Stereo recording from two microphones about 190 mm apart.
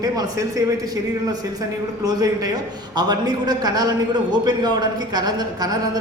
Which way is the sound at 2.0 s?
20° right (ahead or behind).